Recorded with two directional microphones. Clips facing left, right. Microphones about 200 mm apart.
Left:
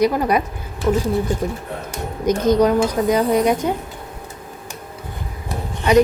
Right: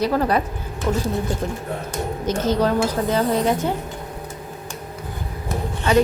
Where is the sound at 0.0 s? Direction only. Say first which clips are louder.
Left 2 dB; 15° left (ahead or behind).